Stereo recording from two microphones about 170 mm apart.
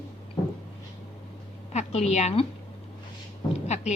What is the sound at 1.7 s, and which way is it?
Speech, 40° left (ahead or behind).